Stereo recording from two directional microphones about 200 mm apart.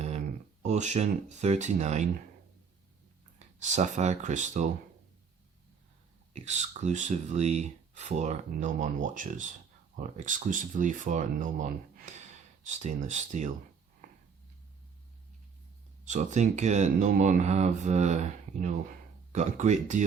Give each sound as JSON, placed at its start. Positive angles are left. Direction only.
{"t": 0.6, "sound": "speech", "side_deg": -35}
{"t": 3.3, "sound": "speech", "side_deg": -35}
{"t": 6.3, "sound": "speech", "side_deg": -35}
{"t": 16.0, "sound": "speech", "side_deg": -35}